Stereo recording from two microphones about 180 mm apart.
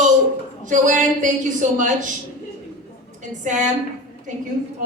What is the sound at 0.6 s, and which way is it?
A woman's voice, 45° right (ahead or behind).